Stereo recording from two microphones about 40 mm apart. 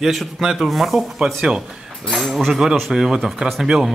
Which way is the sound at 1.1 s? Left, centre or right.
Centre.